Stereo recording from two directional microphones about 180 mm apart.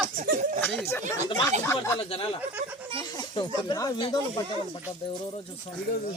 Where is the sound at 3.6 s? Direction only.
20° left (ahead or behind).